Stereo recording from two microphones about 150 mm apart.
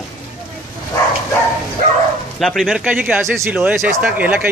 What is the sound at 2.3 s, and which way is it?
Speech, centre (ahead or behind).